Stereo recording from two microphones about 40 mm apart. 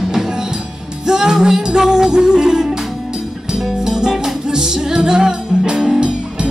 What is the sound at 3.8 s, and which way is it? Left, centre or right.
Music, centre.